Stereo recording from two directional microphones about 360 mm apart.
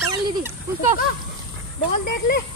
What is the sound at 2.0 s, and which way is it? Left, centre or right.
Speech, left.